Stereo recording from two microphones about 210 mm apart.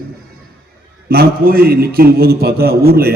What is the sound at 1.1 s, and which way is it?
A man's voice, 45° right (ahead or behind).